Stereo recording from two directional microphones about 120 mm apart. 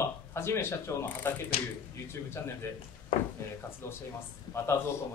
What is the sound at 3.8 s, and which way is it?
Speech, 20° left (ahead or behind).